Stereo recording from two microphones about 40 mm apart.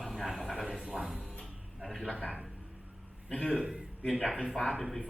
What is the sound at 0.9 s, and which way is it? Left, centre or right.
Music, centre.